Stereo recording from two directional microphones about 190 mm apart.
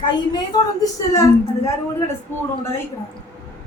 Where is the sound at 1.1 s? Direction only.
15° left (ahead or behind).